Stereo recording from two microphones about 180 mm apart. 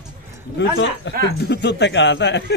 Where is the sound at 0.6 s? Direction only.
70° left (ahead or behind).